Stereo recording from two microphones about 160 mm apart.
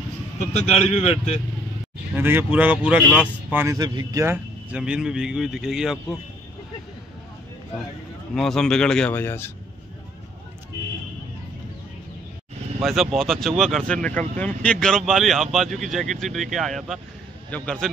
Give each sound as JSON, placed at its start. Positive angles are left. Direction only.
{"t": 0.5, "sound": "a man's voice", "side_deg": 45}
{"t": 2.1, "sound": "speech", "side_deg": -15}
{"t": 8.4, "sound": "speech", "side_deg": 5}
{"t": 12.8, "sound": "a man's voice", "side_deg": 0}